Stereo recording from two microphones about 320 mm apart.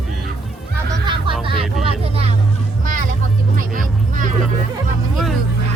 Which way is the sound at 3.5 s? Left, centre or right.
Right.